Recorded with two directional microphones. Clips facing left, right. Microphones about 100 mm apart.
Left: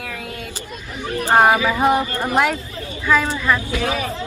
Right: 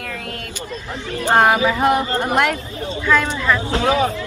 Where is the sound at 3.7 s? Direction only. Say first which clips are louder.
Right 5 dB; 25° right (ahead or behind).